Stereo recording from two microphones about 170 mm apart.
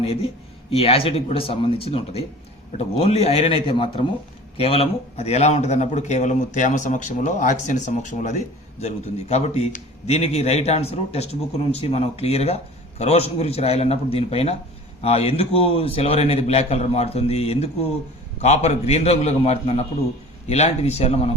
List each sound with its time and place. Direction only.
0.0 s a man's voice: 35° left (ahead or behind)